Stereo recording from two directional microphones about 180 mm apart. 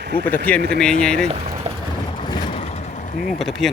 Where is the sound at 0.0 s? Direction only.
65° right (ahead or behind).